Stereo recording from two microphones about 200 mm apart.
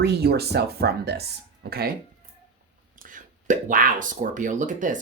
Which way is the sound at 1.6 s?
50° right (ahead or behind).